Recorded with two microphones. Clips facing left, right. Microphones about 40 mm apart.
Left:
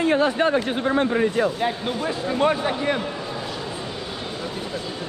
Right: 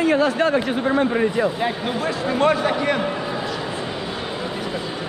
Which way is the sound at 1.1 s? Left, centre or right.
Centre.